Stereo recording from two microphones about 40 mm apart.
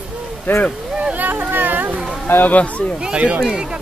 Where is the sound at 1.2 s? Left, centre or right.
Right.